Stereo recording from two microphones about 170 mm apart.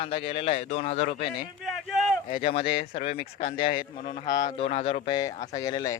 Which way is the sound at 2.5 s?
35° left (ahead or behind).